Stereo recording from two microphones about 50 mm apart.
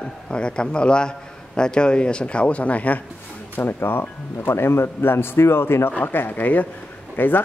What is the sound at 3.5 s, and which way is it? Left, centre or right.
Speech, left.